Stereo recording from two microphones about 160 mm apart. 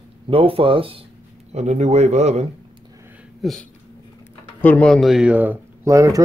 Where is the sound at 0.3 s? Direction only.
35° right (ahead or behind).